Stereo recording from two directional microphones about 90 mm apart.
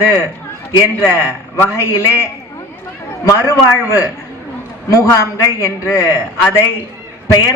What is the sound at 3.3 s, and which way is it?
A man's voice, 35° left (ahead or behind).